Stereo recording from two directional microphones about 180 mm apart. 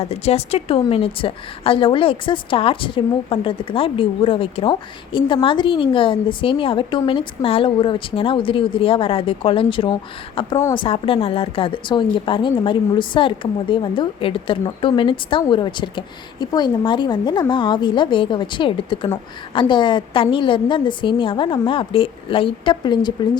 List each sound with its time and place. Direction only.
0.0 s a woman's voice: 35° left (ahead or behind)